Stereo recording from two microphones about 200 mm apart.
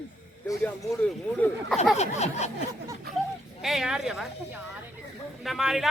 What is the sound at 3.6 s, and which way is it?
A man's voice, centre (ahead or behind).